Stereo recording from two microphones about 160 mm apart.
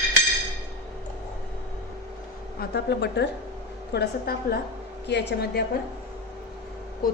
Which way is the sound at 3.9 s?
80° left.